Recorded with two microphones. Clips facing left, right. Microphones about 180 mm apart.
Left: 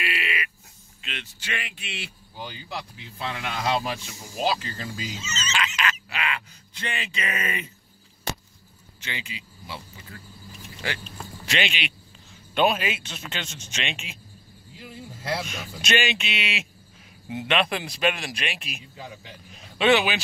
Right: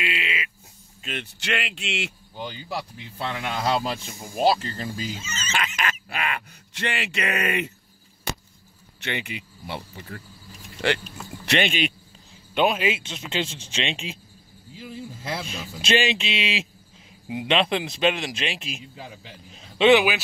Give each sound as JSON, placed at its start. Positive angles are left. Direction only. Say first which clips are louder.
{"t": 0.0, "sound": "a sound", "louder": "right 1 dB", "side_deg": -20}
{"t": 1.4, "sound": "speech", "louder": "right 6 dB", "side_deg": -80}
{"t": 3.4, "sound": "speech", "louder": "right 1 dB", "side_deg": -45}
{"t": 4.5, "sound": "speech", "louder": "right 5 dB", "side_deg": -30}
{"t": 5.0, "sound": "speech", "louder": "right 1 dB", "side_deg": -55}
{"t": 6.7, "sound": "speech", "louder": "right 5 dB", "side_deg": -70}
{"t": 9.0, "sound": "speech", "louder": "right 6 dB", "side_deg": -60}
{"t": 10.8, "sound": "speech", "louder": "right 9 dB", "side_deg": -70}
{"t": 11.4, "sound": "speech", "louder": "right 6 dB", "side_deg": -55}
{"t": 12.5, "sound": "speech", "louder": "right 1 dB", "side_deg": -20}
{"t": 15.4, "sound": "speech", "louder": "right 3 dB", "side_deg": -30}
{"t": 19.8, "sound": "speech", "louder": "right 4 dB", "side_deg": -15}